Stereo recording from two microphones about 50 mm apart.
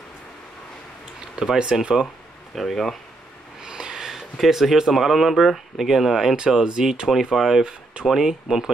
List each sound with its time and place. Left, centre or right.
1.3 s speech: centre
2.5 s speech: centre
3.6 s speech: centre
7.3 s speech: centre
7.6 s speech: centre